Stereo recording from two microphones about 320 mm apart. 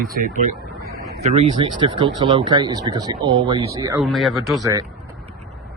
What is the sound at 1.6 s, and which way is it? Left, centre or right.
Speech, centre.